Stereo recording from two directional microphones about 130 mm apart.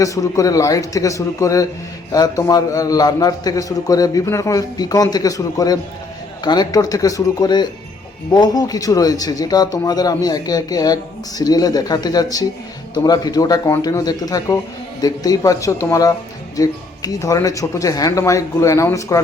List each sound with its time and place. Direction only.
0.0 s a man's voice: 25° left (ahead or behind)